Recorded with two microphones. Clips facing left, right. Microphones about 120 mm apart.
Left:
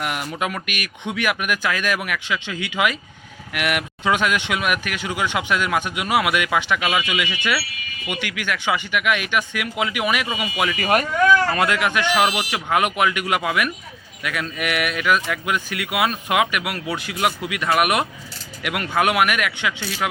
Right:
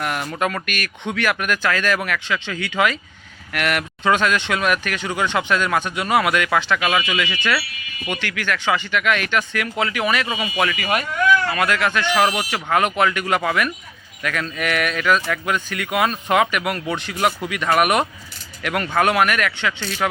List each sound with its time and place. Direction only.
0.0 s speech: 10° left (ahead or behind)
10.8 s speech: 45° left (ahead or behind)
11.6 s speech: 15° left (ahead or behind)